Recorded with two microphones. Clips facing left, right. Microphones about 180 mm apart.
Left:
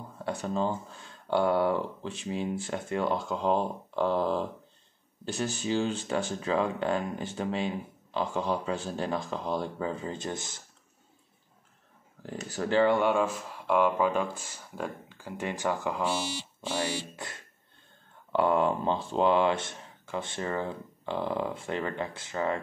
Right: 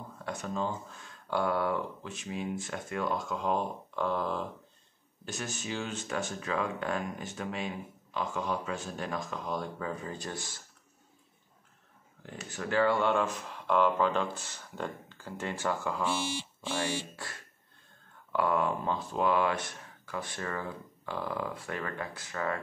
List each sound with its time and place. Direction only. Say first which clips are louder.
0.2 s speech: left 4 dB; 30° left (ahead or behind)
12.2 s speech: left 6 dB; 35° left (ahead or behind)
12.9 s speech: left 3 dB; 10° left (ahead or behind)
16.1 s speech: left 1 dB; 40° left (ahead or behind)
18.3 s speech: left 4 dB; 25° left (ahead or behind)